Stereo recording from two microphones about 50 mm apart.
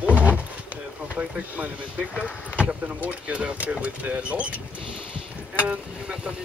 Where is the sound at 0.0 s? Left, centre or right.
Right.